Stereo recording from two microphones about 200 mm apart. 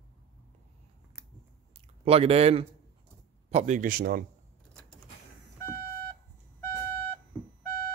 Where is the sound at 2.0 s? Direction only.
30° right (ahead or behind); by 4.2 s 50° right (ahead or behind).